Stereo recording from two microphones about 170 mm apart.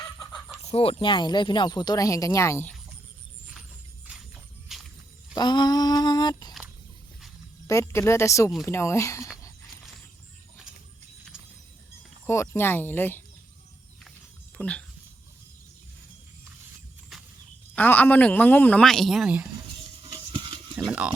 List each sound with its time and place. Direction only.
0.3 s chicken: centre (ahead or behind)
0.7 s speech: 35° left (ahead or behind); by 2.7 s 15° left (ahead or behind)
4.7 s walk: centre (ahead or behind)
5.3 s a sound: 25° left (ahead or behind)
7.7 s a man's voice: 15° left (ahead or behind)
12.2 s a man's voice: 15° left (ahead or behind)
14.6 s a man's voice: 5° left (ahead or behind)
17.7 s a man's voice: 10° left (ahead or behind)
20.1 s a sound: 25° right (ahead or behind)
20.7 s speech: 10° right (ahead or behind)